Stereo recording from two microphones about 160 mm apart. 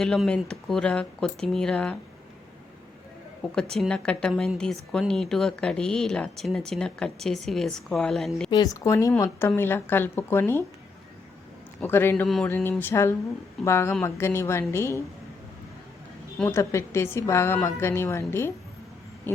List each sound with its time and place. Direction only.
0.0 s a woman's voice: 5° left (ahead or behind)
3.5 s a woman's voice: 5° left (ahead or behind)
8.4 s a woman's voice: 25° left (ahead or behind)
11.8 s a woman's voice: 15° left (ahead or behind)
16.4 s a woman's voice: 15° left (ahead or behind)